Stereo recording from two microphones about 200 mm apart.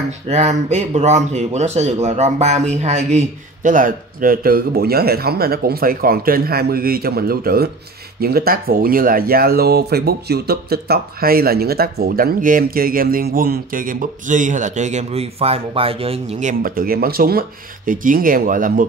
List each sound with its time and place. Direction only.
0.3 s speech: 35° right (ahead or behind)